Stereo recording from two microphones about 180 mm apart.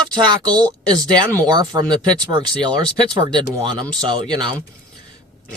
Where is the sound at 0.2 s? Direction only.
25° right (ahead or behind).